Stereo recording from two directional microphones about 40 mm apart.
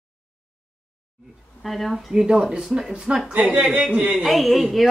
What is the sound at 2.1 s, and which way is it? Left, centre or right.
Speech, centre.